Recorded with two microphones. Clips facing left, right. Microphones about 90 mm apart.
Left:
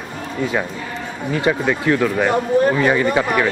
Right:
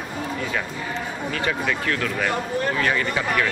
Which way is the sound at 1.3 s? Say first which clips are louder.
Left 7 dB; 20° left (ahead or behind).